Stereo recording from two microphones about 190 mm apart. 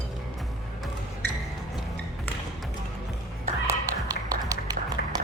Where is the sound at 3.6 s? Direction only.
20° right (ahead or behind).